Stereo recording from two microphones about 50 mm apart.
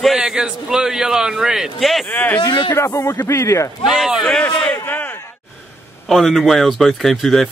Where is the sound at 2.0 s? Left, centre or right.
Left.